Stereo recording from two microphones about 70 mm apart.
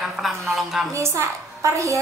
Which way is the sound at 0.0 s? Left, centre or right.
Centre.